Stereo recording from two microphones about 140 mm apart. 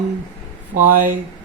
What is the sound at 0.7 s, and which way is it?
Speech, 70° right (ahead or behind).